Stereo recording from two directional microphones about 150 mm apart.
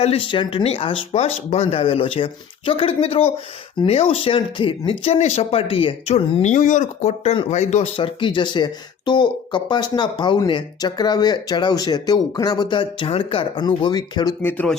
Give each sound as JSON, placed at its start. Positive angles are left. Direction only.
{"t": 0.0, "sound": "speech", "side_deg": 40}
{"t": 7.9, "sound": "speech", "side_deg": 35}
{"t": 14.4, "sound": "speech", "side_deg": 10}